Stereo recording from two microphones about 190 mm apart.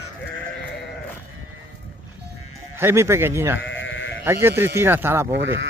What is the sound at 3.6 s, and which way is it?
Sheep, 80° left.